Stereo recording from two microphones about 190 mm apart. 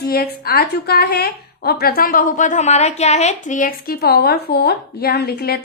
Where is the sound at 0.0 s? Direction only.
55° left (ahead or behind).